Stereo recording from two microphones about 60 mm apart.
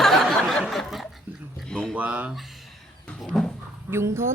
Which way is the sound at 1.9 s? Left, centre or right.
Right.